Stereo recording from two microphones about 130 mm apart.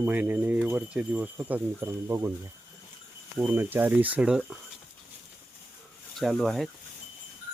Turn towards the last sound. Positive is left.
turn(degrees=0)  # may be behind; listen again after turning